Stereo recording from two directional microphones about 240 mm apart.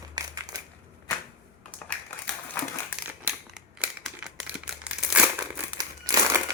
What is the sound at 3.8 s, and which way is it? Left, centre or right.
Crumpling, centre.